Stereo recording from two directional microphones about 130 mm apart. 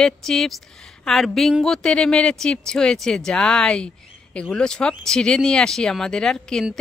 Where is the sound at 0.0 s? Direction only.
5° left (ahead or behind).